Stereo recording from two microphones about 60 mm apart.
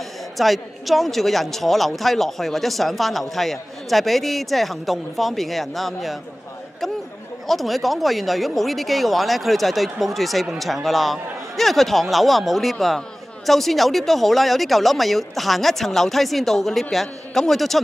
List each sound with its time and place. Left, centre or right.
0.4 s a woman's voice: centre
7.4 s a woman's voice: centre